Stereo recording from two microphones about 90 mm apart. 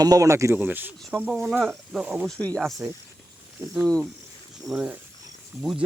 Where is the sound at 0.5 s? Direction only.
20° right (ahead or behind).